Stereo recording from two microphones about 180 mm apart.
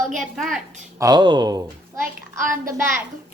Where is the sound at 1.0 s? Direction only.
25° right (ahead or behind).